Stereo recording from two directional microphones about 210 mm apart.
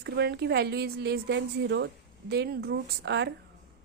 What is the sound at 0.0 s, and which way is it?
A woman's voice, 50° right (ahead or behind).